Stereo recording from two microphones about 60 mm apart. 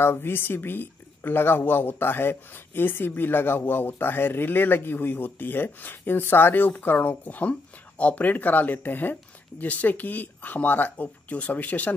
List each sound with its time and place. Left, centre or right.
0.0 s speech: left